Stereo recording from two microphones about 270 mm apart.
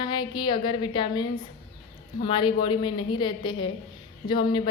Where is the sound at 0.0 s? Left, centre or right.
Centre.